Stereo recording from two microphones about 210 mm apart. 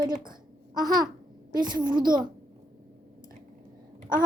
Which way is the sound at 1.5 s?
20° right (ahead or behind).